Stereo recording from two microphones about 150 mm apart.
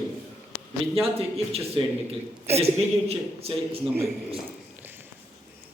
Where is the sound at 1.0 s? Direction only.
40° right (ahead or behind).